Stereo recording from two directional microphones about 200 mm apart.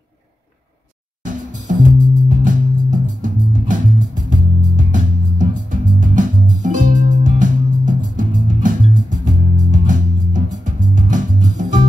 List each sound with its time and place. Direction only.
1.2 s music: 40° right (ahead or behind)